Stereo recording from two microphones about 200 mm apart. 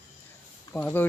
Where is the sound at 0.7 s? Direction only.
10° left (ahead or behind).